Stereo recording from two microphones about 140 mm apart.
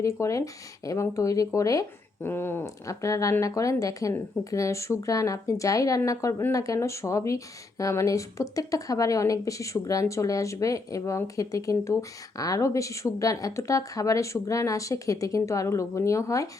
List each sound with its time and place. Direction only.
0.0 s a woman's voice: 20° left (ahead or behind)